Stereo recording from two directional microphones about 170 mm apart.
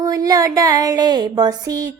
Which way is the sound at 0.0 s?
20° right (ahead or behind).